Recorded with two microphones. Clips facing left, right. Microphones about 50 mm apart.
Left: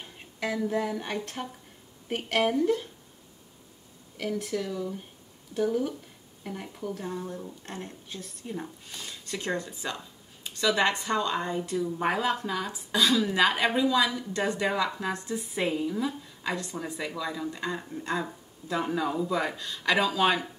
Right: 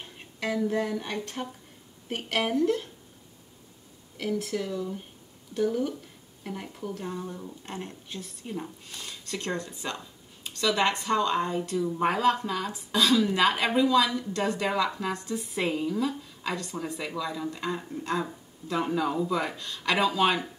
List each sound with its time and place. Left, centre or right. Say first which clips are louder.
0.0 s a woman's voice: even; centre
4.2 s a woman's voice: right 1 dB; centre
7.6 s speech: right 1 dB; right
8.1 s a woman's voice: right 1 dB; centre
8.5 s a woman's voice: right 1 dB; centre